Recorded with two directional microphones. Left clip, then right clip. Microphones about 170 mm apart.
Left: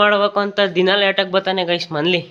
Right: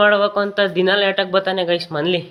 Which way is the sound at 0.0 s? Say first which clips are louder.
Even; 20° left (ahead or behind).